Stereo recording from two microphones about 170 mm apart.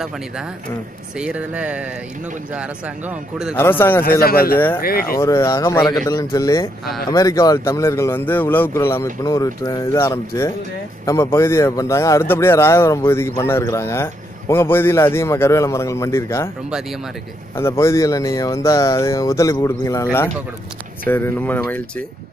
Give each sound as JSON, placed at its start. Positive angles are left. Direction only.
{"t": 1.2, "sound": "speech", "side_deg": -5}
{"t": 3.1, "sound": "speech", "side_deg": -5}
{"t": 3.5, "sound": "speech", "side_deg": 15}
{"t": 4.2, "sound": "a man's voice", "side_deg": 60}
{"t": 5.0, "sound": "speech", "side_deg": 15}
{"t": 17.6, "sound": "speech", "side_deg": 15}